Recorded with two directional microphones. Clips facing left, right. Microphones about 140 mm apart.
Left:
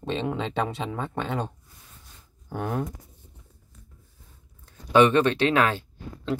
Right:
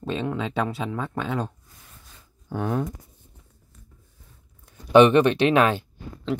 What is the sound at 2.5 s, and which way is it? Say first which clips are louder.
Speech: right 3 dB; 10° left (ahead or behind).